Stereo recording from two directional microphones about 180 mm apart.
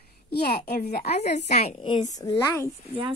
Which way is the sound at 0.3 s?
60° left (ahead or behind).